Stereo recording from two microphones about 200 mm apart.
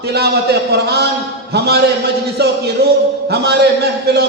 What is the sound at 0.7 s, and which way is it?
A man's voice, 55° right (ahead or behind).